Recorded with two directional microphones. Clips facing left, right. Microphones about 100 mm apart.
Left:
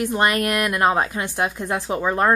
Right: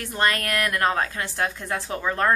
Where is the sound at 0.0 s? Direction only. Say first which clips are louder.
Left 5 dB; 20° left (ahead or behind).